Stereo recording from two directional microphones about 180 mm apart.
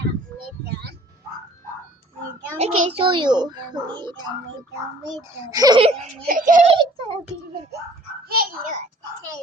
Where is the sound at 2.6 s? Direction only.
30° right (ahead or behind).